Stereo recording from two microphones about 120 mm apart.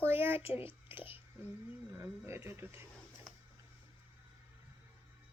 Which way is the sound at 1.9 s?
20° right (ahead or behind).